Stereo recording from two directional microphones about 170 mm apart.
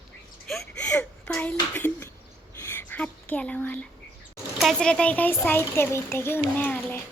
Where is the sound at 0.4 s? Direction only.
5° left (ahead or behind).